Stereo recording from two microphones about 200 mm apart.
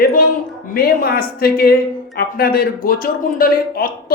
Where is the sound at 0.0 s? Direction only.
45° left (ahead or behind).